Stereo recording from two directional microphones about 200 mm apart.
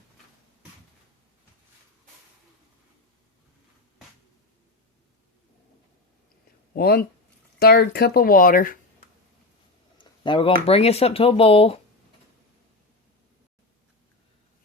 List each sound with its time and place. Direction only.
6.7 s speech: 50° left (ahead or behind)
10.0 s speech: 25° left (ahead or behind)